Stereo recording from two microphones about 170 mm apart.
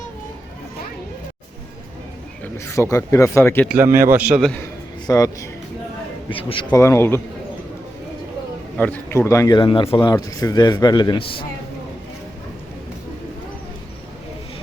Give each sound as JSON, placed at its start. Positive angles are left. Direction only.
{"t": 2.4, "sound": "speech", "side_deg": 15}
{"t": 3.7, "sound": "a man's voice", "side_deg": -15}
{"t": 5.0, "sound": "speech", "side_deg": 20}
{"t": 8.8, "sound": "speech", "side_deg": 10}